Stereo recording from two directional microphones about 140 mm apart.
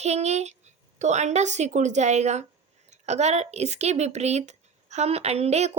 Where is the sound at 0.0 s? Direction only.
50° right (ahead or behind).